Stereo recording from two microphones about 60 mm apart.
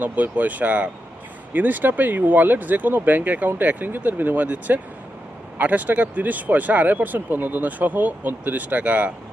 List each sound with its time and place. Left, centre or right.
0.0 s speech: right